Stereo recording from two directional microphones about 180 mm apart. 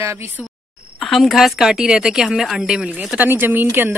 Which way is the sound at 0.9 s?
Centre (ahead or behind).